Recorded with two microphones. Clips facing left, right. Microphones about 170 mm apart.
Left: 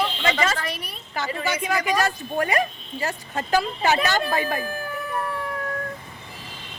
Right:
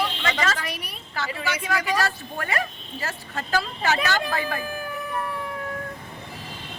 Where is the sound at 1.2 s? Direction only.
20° left (ahead or behind).